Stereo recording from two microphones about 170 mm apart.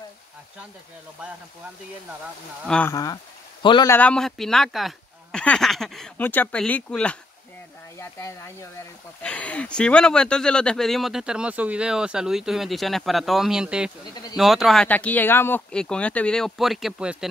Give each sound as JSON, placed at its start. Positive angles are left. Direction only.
{"t": 2.6, "sound": "speech", "side_deg": 5}
{"t": 2.9, "sound": "speech", "side_deg": 20}
{"t": 3.9, "sound": "speech", "side_deg": 5}
{"t": 8.0, "sound": "speech", "side_deg": 15}